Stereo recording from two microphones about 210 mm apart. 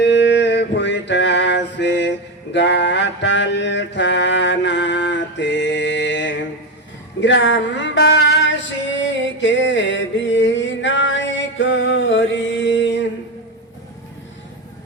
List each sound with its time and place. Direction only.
0.0 s male singing: 55° left (ahead or behind)
2.5 s mantra: 55° left (ahead or behind)
7.2 s a sound: 60° left (ahead or behind)